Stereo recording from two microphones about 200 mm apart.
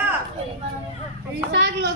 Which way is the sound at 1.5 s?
60° right (ahead or behind).